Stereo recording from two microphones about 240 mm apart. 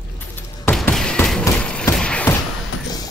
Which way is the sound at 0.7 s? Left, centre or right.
Centre.